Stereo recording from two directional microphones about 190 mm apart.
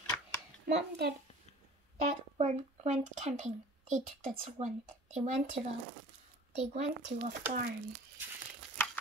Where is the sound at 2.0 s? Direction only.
35° right (ahead or behind).